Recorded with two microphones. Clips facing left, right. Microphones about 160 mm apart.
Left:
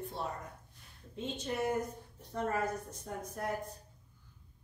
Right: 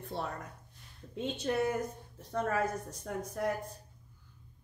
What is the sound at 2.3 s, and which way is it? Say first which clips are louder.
Speech: right 2 dB; 90° right.